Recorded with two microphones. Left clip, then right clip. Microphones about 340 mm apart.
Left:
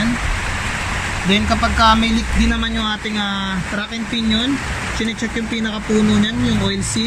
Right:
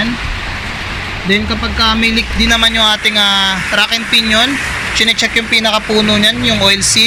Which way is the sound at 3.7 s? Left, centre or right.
Right.